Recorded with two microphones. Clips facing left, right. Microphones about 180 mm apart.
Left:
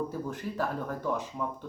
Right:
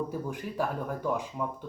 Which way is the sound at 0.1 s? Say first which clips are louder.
Even; 10° right (ahead or behind).